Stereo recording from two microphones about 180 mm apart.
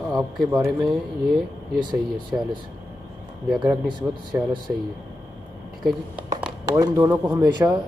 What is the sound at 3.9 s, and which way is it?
Speech, 25° right (ahead or behind).